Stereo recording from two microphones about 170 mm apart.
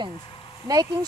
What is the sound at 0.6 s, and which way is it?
Speech, 20° right (ahead or behind).